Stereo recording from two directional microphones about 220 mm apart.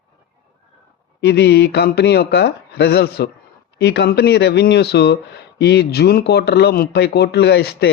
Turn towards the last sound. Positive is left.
turn(degrees=50)  # may be behind; listen again after turning